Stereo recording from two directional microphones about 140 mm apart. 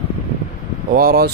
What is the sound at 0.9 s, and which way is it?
Mantra, 90° right.